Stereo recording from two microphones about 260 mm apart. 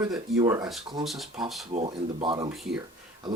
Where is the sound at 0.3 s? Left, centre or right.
Centre.